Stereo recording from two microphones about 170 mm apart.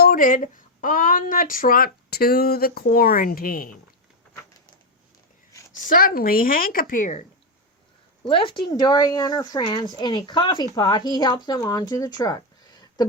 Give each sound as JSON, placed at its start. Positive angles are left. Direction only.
{"t": 0.0, "sound": "a woman's voice", "side_deg": 55}
{"t": 5.9, "sound": "a woman's voice", "side_deg": 55}
{"t": 8.2, "sound": "speech", "side_deg": 30}